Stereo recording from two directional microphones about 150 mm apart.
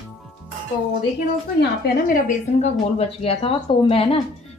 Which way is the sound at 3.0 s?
40° left (ahead or behind).